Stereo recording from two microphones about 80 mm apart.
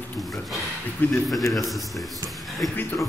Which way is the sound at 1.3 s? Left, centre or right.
Centre.